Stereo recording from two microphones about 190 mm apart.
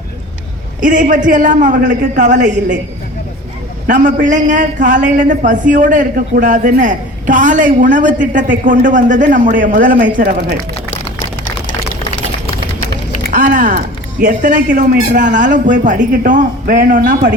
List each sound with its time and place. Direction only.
0.8 s a man's voice: 45° right (ahead or behind)
3.8 s a man's voice: 45° right (ahead or behind)
13.3 s a sound: 45° right (ahead or behind)
14.3 s a man's voice: 45° right (ahead or behind)